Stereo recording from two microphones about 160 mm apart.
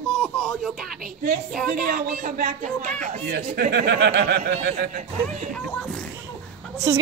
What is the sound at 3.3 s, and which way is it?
Speech, 75° right (ahead or behind).